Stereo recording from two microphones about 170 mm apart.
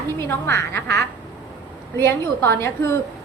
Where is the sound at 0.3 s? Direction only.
15° left (ahead or behind).